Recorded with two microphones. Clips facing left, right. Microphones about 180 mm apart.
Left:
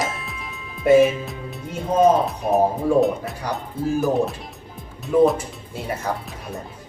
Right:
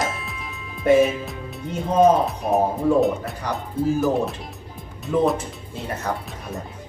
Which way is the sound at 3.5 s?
Centre (ahead or behind).